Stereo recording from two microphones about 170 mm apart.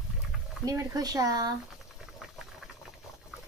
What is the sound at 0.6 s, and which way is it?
Speech, 20° right (ahead or behind).